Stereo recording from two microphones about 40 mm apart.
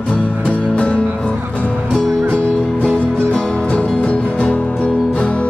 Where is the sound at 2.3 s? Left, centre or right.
Left.